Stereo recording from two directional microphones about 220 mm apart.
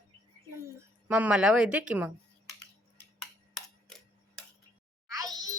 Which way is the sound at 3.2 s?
5° left (ahead or behind).